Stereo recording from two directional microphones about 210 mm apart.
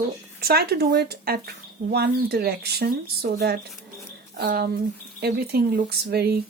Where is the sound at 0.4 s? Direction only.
50° right (ahead or behind).